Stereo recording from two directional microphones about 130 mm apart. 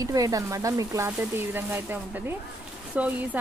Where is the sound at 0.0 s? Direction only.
25° right (ahead or behind).